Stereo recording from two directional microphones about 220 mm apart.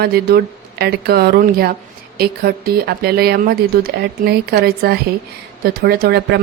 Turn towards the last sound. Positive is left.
turn(degrees=-45)  # may be behind; listen again after turning